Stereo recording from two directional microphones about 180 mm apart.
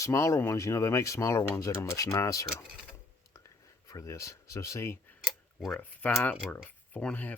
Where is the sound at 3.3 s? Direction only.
15° left (ahead or behind).